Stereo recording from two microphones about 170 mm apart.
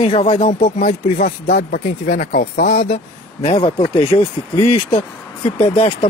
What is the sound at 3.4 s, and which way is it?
Speech, 35° left (ahead or behind).